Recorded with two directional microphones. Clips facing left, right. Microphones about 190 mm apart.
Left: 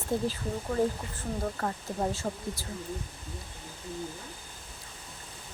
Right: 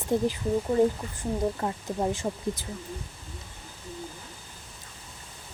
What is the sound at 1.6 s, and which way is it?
Speech, 15° right (ahead or behind).